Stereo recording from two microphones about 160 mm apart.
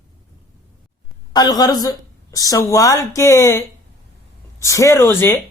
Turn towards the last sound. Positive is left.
turn(degrees=15)  # may be behind; listen again after turning